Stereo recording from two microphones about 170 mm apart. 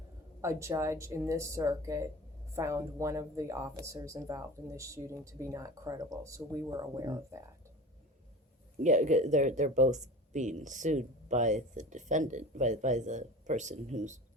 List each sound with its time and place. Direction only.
0.4 s speech: 15° right (ahead or behind)
8.8 s speech: 45° right (ahead or behind)